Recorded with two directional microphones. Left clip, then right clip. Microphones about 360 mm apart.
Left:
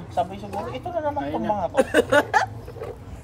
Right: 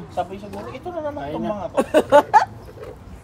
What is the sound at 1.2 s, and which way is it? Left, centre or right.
Speech, centre.